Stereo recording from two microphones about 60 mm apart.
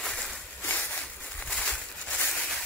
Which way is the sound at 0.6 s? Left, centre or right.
Left.